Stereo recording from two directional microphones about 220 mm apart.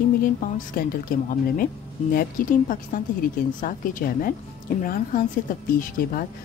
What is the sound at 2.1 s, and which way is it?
A woman's voice, 40° left (ahead or behind).